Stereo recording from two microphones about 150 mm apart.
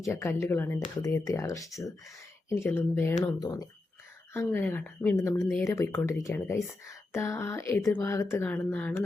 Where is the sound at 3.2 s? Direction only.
25° left (ahead or behind).